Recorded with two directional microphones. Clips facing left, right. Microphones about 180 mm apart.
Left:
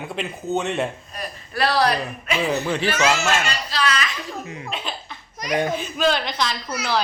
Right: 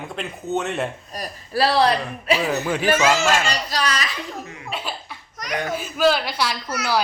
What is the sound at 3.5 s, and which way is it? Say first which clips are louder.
Speech: even; 40° right (ahead or behind).